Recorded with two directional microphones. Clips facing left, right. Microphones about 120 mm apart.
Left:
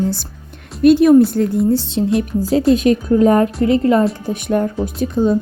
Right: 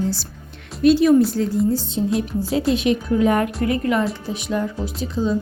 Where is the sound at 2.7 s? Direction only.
45° left (ahead or behind).